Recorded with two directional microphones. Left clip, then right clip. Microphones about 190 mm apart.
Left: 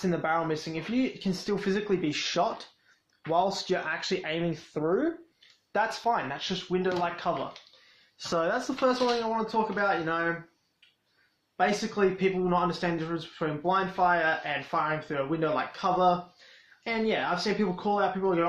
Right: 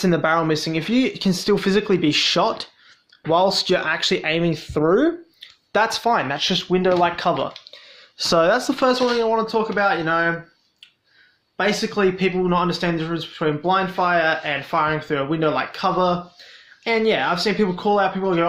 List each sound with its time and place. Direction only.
0.0 s speech: 55° right (ahead or behind)
8.3 s speech: 40° right (ahead or behind)
11.5 s speech: 35° right (ahead or behind)